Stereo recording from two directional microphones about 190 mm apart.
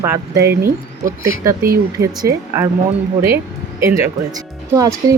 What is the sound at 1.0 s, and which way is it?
Speech, 15° right (ahead or behind).